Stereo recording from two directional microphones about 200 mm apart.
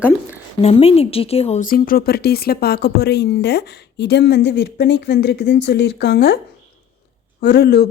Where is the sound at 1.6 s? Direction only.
45° left (ahead or behind).